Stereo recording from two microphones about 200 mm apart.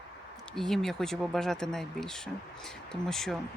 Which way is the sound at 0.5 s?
Centre (ahead or behind).